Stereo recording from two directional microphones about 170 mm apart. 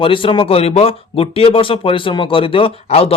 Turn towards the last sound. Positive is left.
turn(degrees=35)  # may be behind; listen again after turning